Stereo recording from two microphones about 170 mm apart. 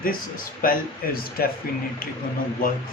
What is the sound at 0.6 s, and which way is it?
Speech, 60° left (ahead or behind).